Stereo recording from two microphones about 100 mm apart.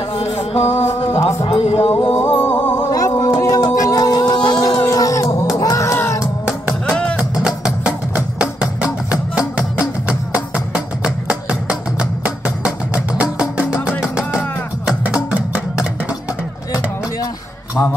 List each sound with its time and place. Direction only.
0.4 s music: 75° left (ahead or behind)
0.7 s music: 30° left (ahead or behind)
1.4 s speech: 60° left (ahead or behind)
1.9 s music: 25° left (ahead or behind)
2.9 s a sound: 35° left (ahead or behind)
4.8 s music: 35° left (ahead or behind)
7.2 s music: 5° right (ahead or behind)
12.0 s music: 10° right (ahead or behind)